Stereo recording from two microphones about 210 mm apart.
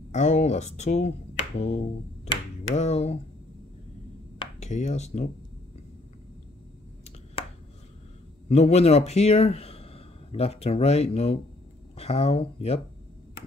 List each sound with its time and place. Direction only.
0.1 s speech: 35° left (ahead or behind)
4.4 s speech: 35° left (ahead or behind)
8.5 s speech: 30° left (ahead or behind)